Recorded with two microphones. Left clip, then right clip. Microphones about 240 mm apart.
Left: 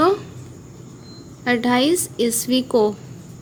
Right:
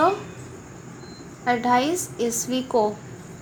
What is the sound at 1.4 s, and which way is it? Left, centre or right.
A woman's voice, left.